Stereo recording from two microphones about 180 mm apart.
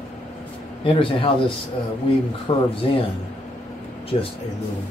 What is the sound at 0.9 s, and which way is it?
Speech, 30° left (ahead or behind).